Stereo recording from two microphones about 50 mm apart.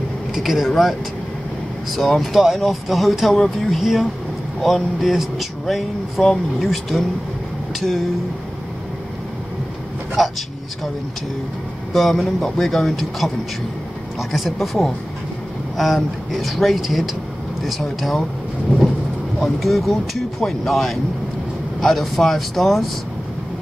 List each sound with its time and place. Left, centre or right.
0.3 s speech: centre
10.2 s vehicle: centre
11.9 s speech: centre
14.3 s speech: centre
19.6 s speech: centre